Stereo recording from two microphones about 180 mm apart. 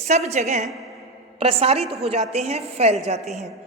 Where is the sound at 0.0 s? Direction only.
40° right (ahead or behind).